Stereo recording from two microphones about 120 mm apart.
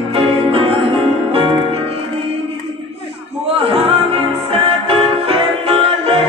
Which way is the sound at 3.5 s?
55° right (ahead or behind).